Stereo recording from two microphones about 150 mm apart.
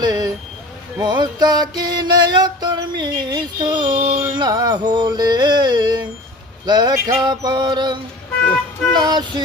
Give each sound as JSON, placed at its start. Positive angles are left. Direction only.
{"t": 0.0, "sound": "vehicle", "side_deg": -25}
{"t": 1.0, "sound": "music", "side_deg": -30}
{"t": 4.2, "sound": "carnatic music", "side_deg": -25}
{"t": 6.7, "sound": "music", "side_deg": -30}
{"t": 9.0, "sound": "music", "side_deg": -25}